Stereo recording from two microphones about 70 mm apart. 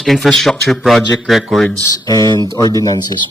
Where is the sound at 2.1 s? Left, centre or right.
Left.